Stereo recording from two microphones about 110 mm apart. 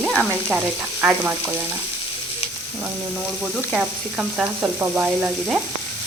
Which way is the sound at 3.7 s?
10° right (ahead or behind).